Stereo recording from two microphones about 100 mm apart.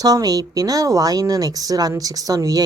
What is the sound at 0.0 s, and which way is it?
Speech, 40° right (ahead or behind).